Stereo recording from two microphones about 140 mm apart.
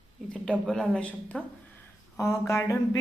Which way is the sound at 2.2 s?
20° left (ahead or behind).